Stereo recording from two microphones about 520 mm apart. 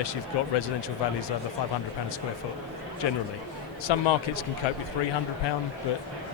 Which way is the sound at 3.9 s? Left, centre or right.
Left.